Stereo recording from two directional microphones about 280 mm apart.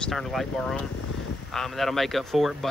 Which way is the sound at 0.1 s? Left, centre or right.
Centre.